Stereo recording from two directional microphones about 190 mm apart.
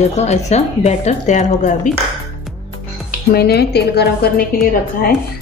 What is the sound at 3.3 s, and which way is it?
A woman's voice, 55° left (ahead or behind).